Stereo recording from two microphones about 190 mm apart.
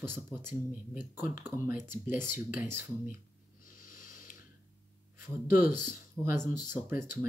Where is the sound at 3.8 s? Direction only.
45° left (ahead or behind).